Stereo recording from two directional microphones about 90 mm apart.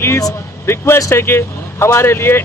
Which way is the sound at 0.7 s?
30° left (ahead or behind).